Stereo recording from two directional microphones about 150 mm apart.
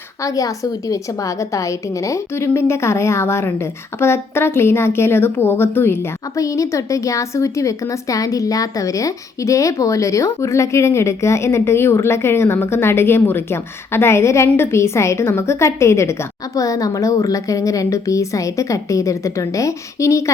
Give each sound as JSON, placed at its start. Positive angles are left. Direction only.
{"t": 0.2, "sound": "a woman's voice", "side_deg": 25}